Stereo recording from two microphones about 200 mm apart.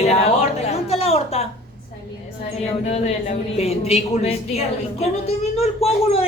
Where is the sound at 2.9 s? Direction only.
30° left (ahead or behind).